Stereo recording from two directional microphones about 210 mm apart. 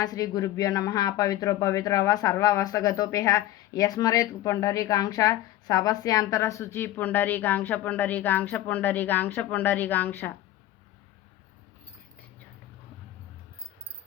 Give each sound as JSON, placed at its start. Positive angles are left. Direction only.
{"t": 0.0, "sound": "speech", "side_deg": 20}